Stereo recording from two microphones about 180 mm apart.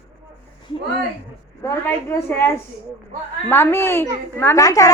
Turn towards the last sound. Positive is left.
turn(degrees=20)  # may be behind; listen again after turning